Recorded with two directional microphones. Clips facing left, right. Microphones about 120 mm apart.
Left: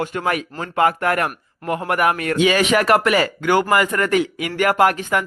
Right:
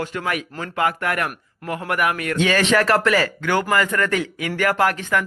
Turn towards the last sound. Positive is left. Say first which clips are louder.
# left 3 dB
turn(degrees=20)  # may be behind; listen again after turning